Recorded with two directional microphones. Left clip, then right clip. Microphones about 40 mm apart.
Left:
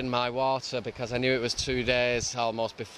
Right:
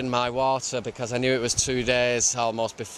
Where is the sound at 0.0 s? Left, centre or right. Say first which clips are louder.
Right 3 dB; right.